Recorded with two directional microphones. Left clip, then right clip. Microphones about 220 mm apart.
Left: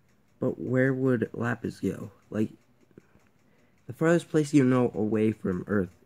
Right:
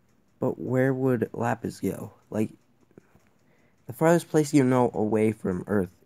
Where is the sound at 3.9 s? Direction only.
5° right (ahead or behind).